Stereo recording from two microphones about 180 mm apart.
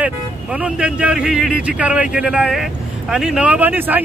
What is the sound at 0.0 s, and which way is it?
Speech, 5° right (ahead or behind).